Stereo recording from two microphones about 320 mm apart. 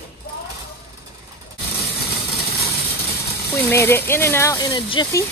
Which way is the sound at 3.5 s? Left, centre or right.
Centre.